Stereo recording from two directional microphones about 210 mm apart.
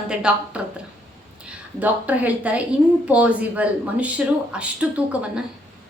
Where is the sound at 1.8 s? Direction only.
5° right (ahead or behind).